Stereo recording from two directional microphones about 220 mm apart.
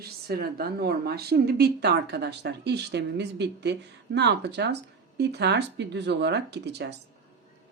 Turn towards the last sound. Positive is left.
turn(degrees=-50)  # may be behind; listen again after turning